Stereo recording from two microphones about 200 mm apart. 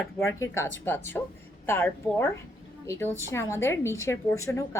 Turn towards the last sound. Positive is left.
turn(degrees=15)  # may be behind; listen again after turning